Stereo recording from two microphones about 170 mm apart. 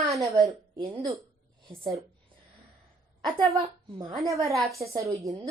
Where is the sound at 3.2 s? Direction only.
20° right (ahead or behind).